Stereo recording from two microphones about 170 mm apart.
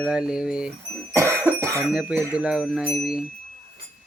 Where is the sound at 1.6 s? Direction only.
15° right (ahead or behind).